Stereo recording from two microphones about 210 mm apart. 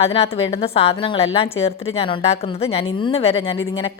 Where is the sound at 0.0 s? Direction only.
30° left (ahead or behind).